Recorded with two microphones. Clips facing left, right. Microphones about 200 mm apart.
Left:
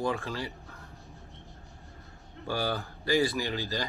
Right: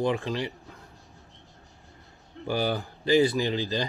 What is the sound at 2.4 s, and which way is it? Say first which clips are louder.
Speech: right 4 dB; 15° right (ahead or behind).